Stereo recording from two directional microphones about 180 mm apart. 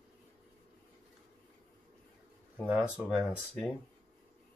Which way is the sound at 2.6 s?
5° right (ahead or behind).